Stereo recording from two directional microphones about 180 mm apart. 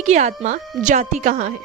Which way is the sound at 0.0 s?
40° right (ahead or behind).